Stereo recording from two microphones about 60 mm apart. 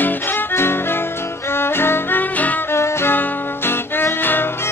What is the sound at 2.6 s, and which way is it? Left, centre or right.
Music, left.